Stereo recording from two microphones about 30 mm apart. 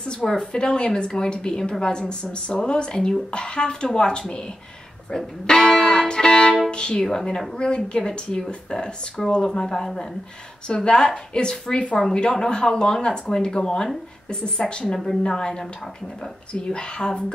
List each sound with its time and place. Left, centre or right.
0.2 s a woman's voice: centre
5.1 s speech: centre
5.9 s music: left
6.7 s a woman's voice: left